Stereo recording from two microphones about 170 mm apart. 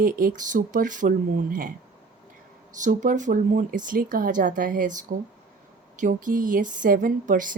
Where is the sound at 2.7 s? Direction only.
50° right (ahead or behind).